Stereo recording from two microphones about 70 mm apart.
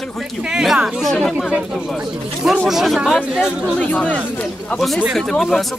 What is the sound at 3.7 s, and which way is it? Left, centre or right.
Speech, centre.